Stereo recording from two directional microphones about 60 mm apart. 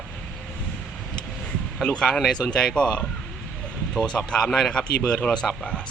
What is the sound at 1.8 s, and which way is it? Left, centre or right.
Speech, centre.